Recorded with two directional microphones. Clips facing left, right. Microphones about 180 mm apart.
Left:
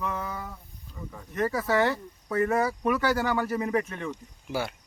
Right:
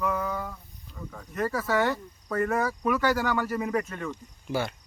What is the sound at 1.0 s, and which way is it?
Speech, 15° left (ahead or behind).